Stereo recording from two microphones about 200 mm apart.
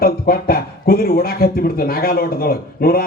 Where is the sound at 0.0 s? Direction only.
50° left (ahead or behind).